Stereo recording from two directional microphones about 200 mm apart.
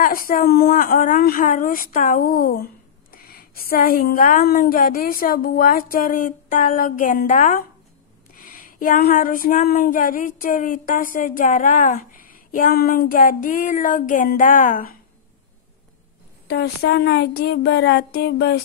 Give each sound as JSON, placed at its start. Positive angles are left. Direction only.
{"t": 0.0, "sound": "a woman's voice", "side_deg": 45}
{"t": 16.4, "sound": "speech", "side_deg": 55}